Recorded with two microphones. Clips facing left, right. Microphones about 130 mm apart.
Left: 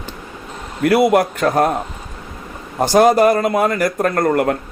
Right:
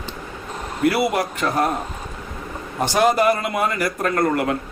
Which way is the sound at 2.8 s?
40° left (ahead or behind).